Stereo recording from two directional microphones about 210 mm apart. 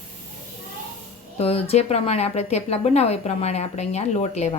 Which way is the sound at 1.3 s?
30° left (ahead or behind).